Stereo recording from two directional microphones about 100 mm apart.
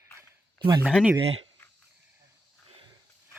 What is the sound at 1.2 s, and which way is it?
Speech, 70° right (ahead or behind).